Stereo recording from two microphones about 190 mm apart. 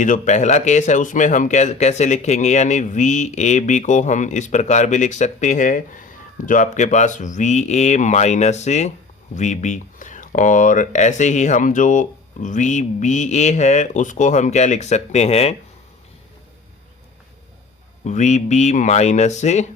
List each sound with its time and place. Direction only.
0.0 s speech: 40° left (ahead or behind)
18.0 s speech: 40° left (ahead or behind)